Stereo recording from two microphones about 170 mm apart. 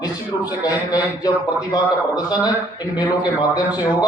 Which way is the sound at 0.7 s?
25° left (ahead or behind).